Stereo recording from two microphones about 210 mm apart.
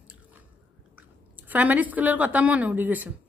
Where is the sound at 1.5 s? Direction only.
10° right (ahead or behind).